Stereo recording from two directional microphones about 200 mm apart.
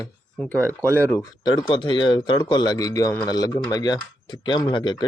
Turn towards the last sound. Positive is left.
turn(degrees=25)  # may be behind; listen again after turning